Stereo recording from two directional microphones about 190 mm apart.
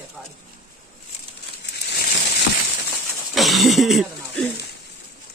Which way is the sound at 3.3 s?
Centre (ahead or behind).